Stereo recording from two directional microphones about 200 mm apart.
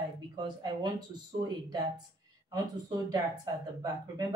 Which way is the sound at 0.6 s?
20° right (ahead or behind).